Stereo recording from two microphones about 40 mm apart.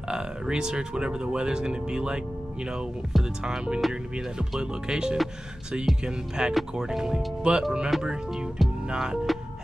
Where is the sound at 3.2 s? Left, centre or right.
Centre.